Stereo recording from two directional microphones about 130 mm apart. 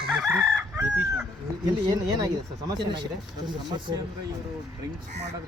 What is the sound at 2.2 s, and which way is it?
Speech, 30° right (ahead or behind).